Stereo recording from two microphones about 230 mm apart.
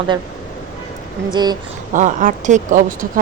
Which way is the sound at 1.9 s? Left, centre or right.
Right.